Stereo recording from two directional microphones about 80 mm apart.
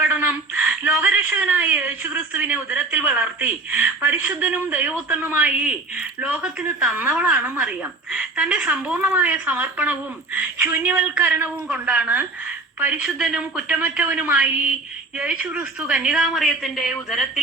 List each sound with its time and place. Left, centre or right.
0.0 s a woman's voice: centre
13.1 s a woman's voice: centre
13.6 s a woman's voice: centre
16.1 s speech: centre